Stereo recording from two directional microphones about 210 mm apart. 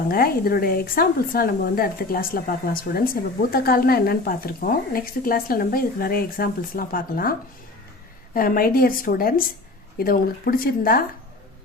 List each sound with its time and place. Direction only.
0.1 s speech: 45° left (ahead or behind)